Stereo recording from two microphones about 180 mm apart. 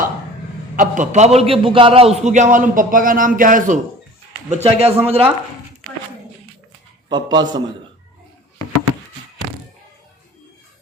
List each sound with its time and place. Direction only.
0.8 s a man's voice: 40° right (ahead or behind)
4.4 s speech: 35° right (ahead or behind)
7.1 s a man's voice: 25° right (ahead or behind)